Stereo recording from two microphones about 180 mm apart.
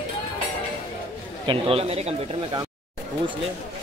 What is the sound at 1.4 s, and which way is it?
Speech, 30° right (ahead or behind).